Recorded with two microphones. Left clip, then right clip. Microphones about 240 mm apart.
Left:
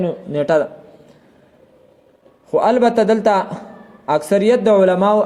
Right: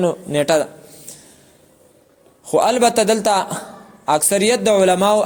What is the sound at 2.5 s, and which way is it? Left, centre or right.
A man's voice, right.